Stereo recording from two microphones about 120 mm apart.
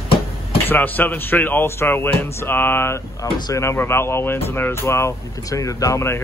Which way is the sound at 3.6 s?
20° left (ahead or behind).